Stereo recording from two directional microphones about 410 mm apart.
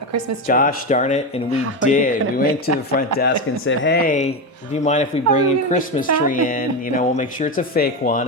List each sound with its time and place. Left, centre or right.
0.4 s speech: centre